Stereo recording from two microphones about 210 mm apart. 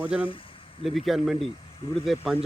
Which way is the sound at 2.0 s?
Centre (ahead or behind).